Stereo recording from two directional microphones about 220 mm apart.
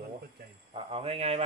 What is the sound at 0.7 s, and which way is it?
Speech, 25° right (ahead or behind).